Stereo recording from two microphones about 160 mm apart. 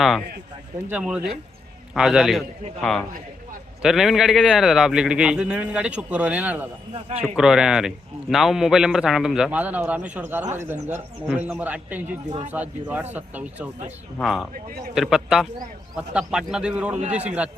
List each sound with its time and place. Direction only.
0.9 s a man's voice: 10° right (ahead or behind)
3.8 s a man's voice: centre (ahead or behind)
14.5 s speech: 65° right (ahead or behind)
14.9 s a man's voice: centre (ahead or behind)